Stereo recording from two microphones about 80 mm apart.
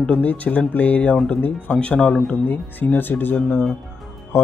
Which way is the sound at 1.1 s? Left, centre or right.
Centre.